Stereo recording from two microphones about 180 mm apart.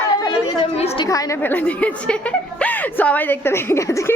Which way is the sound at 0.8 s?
35° left (ahead or behind).